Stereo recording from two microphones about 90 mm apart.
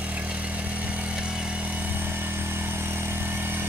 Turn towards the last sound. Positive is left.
turn(degrees=-25)  # may be behind; listen again after turning